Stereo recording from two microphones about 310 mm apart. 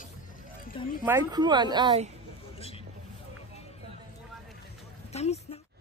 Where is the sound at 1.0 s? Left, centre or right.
Centre.